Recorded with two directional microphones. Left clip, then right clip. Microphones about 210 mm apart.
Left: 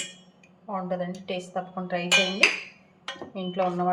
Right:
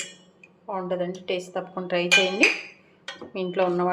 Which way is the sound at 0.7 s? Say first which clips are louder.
Right 3 dB; 35° right (ahead or behind).